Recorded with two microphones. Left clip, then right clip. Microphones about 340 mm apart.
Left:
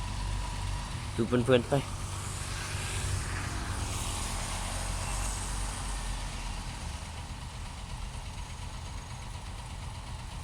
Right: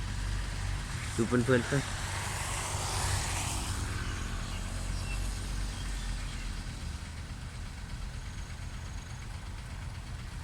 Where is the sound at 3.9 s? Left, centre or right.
Centre.